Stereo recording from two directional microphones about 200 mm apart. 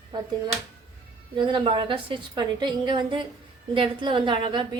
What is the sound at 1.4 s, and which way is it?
A woman's voice, 25° right (ahead or behind).